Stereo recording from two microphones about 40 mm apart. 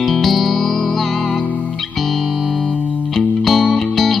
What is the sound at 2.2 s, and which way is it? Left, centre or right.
Music, left.